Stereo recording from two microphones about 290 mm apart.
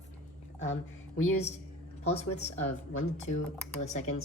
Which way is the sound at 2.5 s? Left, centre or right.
Left.